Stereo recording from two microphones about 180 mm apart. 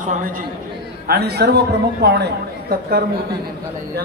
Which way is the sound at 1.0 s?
60° right (ahead or behind).